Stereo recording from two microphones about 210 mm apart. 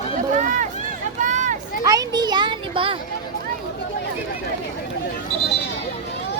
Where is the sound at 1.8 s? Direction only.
15° right (ahead or behind).